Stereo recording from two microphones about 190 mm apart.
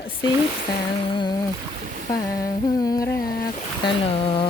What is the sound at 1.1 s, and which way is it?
Boat, 25° left (ahead or behind).